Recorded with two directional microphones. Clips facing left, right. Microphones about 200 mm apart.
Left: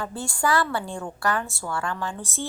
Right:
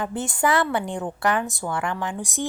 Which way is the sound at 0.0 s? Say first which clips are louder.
Right 3 dB; 20° right (ahead or behind).